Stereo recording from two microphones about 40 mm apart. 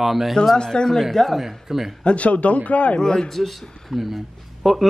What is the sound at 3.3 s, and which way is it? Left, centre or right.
A man's voice, centre.